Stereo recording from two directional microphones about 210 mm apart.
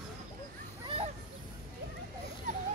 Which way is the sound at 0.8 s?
25° right (ahead or behind).